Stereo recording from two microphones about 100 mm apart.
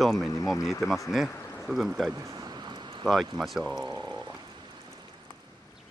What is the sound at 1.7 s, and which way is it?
Speech, centre (ahead or behind).